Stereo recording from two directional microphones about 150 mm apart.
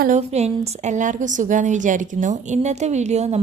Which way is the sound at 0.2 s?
45° right (ahead or behind).